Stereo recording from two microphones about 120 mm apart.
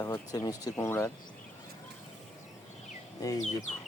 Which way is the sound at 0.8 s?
20° left (ahead or behind).